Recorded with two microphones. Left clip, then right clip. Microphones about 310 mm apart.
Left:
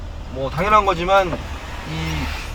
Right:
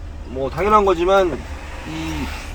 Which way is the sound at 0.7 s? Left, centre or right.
Right.